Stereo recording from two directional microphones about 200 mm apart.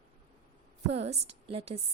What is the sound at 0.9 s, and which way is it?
Speech, 30° right (ahead or behind).